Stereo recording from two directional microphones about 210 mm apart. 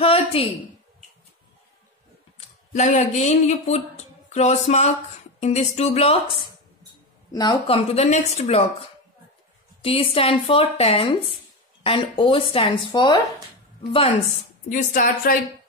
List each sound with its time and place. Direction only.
0.0 s a sound: 25° left (ahead or behind)
2.3 s a woman's voice: 35° left (ahead or behind)
7.3 s a woman's voice: 25° left (ahead or behind)
9.8 s a woman's voice: 25° left (ahead or behind)
14.7 s a woman's voice: 40° left (ahead or behind)